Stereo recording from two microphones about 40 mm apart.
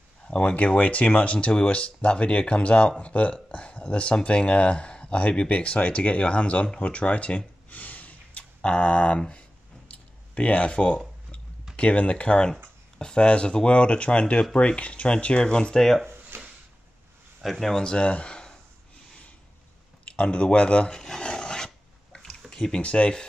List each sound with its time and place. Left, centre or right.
0.3 s speech: left
7.7 s a sound: left
11.7 s speech: left
15.8 s speech: centre
16.3 s drawer open or close: right
17.4 s speech: centre
17.8 s speech: left
20.1 s speech: left
21.0 s filing: left
22.5 s a sound: centre
22.8 s speech: left